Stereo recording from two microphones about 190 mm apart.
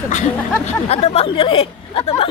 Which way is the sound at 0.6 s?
35° left (ahead or behind).